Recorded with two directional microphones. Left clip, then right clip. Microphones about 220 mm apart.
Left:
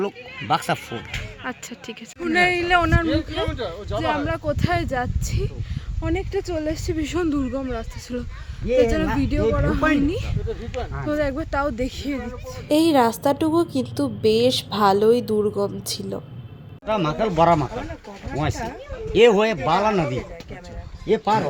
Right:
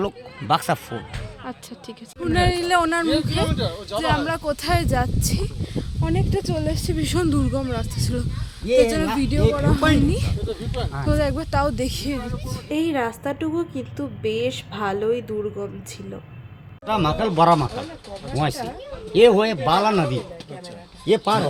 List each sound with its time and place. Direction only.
0.0 s speech: 15° right (ahead or behind)
1.5 s speech: centre (ahead or behind)
3.3 s speech: 30° left (ahead or behind)
4.3 s speech: 5° right (ahead or behind)
8.6 s a woman's voice: 5° left (ahead or behind)
12.6 s a woman's voice: 15° left (ahead or behind)
16.8 s speech: 5° right (ahead or behind)
21.1 s speech: 40° right (ahead or behind)